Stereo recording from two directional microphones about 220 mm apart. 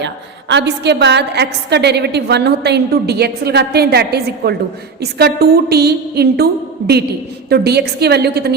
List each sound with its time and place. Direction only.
0.0 s a woman's voice: 50° right (ahead or behind)